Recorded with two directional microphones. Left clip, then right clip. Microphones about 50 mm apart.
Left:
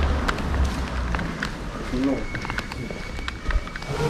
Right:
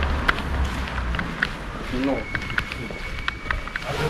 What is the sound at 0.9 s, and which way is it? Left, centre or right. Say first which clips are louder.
Run: right 6 dB; centre.